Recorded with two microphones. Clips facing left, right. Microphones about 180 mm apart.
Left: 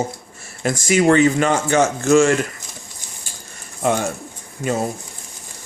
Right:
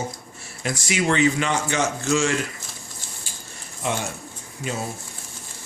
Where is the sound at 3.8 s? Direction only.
45° left (ahead or behind).